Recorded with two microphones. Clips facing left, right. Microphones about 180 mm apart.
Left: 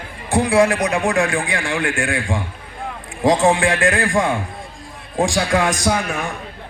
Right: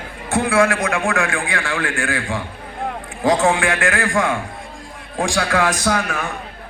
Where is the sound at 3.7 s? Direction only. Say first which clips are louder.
Left 2 dB; 20° left (ahead or behind).